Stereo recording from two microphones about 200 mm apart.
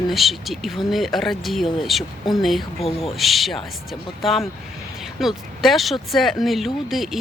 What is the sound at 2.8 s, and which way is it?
Speech, 30° left (ahead or behind).